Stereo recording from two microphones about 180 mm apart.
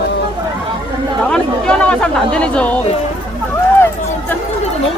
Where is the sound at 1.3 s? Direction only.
5° left (ahead or behind).